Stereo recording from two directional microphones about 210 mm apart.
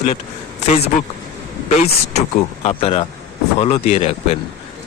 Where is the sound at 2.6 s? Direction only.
25° left (ahead or behind).